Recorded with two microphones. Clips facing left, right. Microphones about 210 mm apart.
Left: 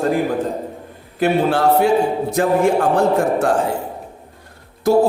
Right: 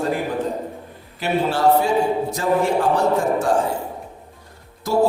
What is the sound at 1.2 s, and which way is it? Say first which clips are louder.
A woman's voice: left 3 dB; 55° left (ahead or behind).